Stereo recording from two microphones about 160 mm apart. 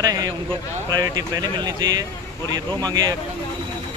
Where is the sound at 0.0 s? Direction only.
25° right (ahead or behind).